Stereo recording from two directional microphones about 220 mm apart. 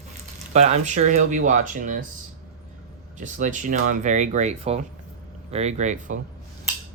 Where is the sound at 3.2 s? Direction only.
35° right (ahead or behind).